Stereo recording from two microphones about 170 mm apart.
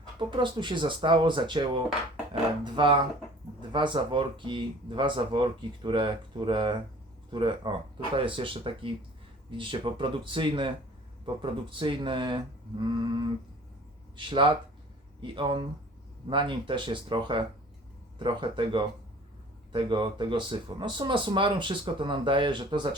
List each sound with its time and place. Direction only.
0.2 s speech: 30° right (ahead or behind)